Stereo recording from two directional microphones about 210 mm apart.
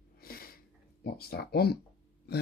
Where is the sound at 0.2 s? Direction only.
45° left (ahead or behind).